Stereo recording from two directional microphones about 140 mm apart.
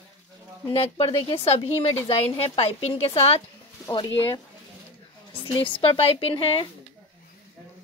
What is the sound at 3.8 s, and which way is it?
Speech, 30° left (ahead or behind).